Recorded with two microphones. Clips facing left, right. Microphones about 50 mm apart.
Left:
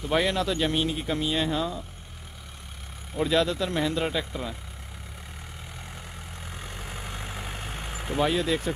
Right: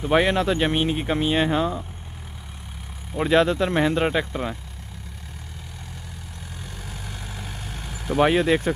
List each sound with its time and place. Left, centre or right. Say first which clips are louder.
0.0 s speech: right 5 dB; right
3.2 s speech: right 5 dB; right
6.8 s vehicle: left 1 dB; left
8.2 s speech: right 6 dB; right